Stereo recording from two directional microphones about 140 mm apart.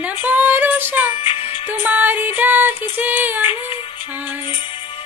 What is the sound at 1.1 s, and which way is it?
Music, 40° left (ahead or behind).